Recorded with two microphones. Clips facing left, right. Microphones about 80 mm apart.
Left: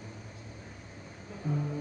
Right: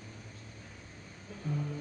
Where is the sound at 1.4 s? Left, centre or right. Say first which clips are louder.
Left 3 dB; centre.